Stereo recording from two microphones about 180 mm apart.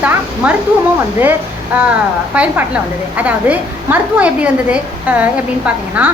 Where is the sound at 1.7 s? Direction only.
10° right (ahead or behind).